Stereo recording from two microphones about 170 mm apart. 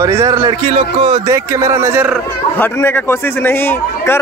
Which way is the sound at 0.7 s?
30° right (ahead or behind).